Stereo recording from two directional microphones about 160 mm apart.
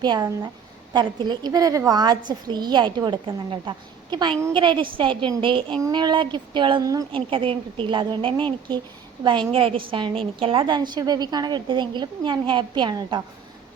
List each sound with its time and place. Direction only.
0.0 s a woman's voice: 25° right (ahead or behind)